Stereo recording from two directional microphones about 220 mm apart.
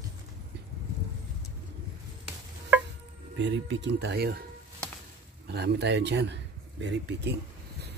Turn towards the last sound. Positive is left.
turn(degrees=-50)  # may be behind; listen again after turning